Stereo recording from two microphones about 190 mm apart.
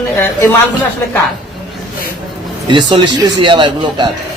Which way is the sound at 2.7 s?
25° right (ahead or behind).